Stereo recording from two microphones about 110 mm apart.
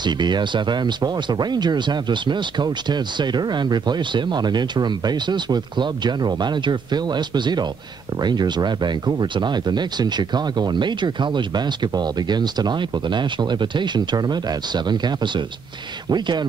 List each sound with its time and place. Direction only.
0.0 s speech: 40° right (ahead or behind)